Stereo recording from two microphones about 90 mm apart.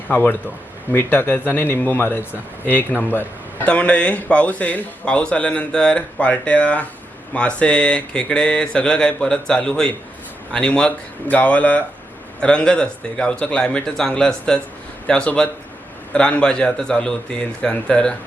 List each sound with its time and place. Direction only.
0.1 s a man's voice: 20° left (ahead or behind)